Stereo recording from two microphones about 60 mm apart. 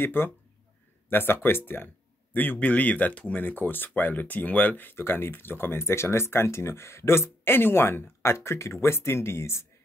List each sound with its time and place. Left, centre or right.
0.0 s speech: left
4.9 s speech: left